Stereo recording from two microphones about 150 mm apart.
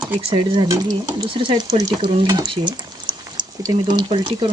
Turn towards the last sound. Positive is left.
turn(degrees=-30)  # may be behind; listen again after turning